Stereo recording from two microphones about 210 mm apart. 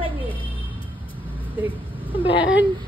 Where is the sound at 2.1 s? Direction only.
25° left (ahead or behind).